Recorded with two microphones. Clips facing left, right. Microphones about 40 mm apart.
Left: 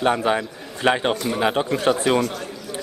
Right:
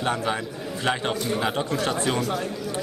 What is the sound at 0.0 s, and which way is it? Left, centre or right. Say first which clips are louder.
Speech: left 6 dB; left.